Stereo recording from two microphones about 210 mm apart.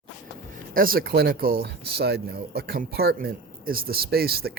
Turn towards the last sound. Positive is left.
turn(degrees=-45)  # may be behind; listen again after turning